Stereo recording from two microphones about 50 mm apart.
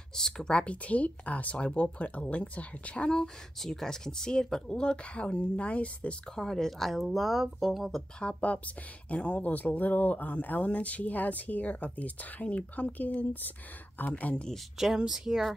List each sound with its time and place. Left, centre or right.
0.1 s speech: centre
3.1 s speech: centre; by 6.1 s left
6.3 s speech: centre
8.2 s speech: left
14.3 s speech: centre
14.8 s speech: centre